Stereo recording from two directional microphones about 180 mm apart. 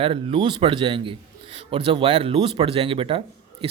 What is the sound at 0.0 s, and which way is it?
A man's voice, 30° right (ahead or behind).